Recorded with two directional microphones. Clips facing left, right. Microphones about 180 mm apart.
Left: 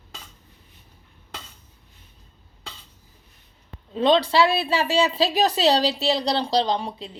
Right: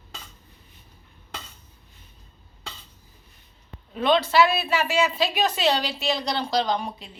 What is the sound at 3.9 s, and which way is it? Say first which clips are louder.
Speech: left 3 dB; 30° left (ahead or behind).